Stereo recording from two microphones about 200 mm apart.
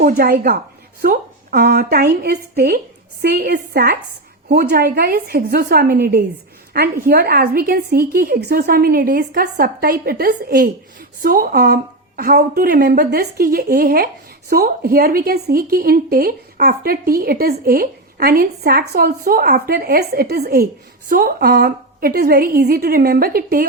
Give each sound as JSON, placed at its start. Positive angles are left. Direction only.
{"t": 0.0, "sound": "a woman's voice", "side_deg": -50}